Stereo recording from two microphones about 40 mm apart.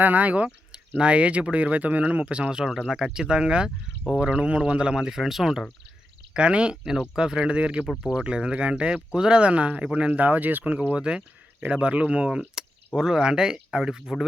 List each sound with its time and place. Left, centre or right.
0.0 s speech: right
2.6 s speech: centre
2.9 s speech: centre
6.3 s speech: right
10.1 s speech: right
10.6 s speech: right
13.0 s speech: centre